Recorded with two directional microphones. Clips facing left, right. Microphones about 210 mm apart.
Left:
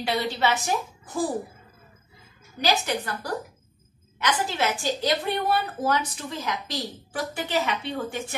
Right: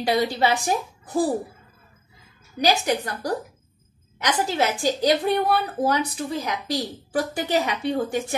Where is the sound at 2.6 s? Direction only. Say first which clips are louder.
Right 4 dB; 40° right (ahead or behind).